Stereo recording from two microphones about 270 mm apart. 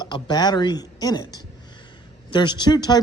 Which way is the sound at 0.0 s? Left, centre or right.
Centre.